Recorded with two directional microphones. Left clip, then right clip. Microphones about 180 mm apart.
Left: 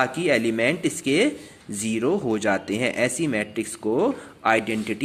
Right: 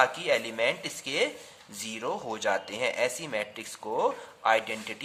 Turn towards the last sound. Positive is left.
turn(degrees=10)  # may be behind; listen again after turning